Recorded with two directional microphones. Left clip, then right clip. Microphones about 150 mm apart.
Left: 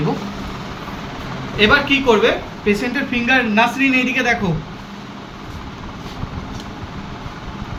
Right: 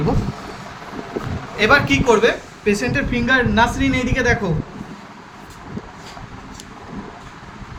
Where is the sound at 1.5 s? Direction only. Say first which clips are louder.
Left 1 dB; 20° right (ahead or behind).